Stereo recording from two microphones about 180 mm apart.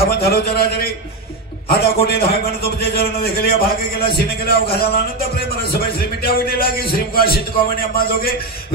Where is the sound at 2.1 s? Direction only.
60° left (ahead or behind).